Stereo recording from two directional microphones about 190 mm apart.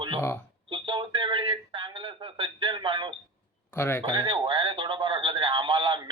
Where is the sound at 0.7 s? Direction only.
25° right (ahead or behind).